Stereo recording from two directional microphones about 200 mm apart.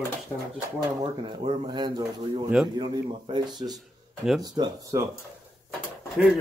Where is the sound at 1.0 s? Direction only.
25° right (ahead or behind).